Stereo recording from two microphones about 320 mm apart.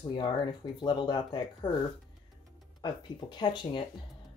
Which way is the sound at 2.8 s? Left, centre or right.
Centre.